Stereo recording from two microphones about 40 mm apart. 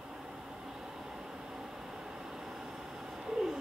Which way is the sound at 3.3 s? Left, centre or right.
Centre.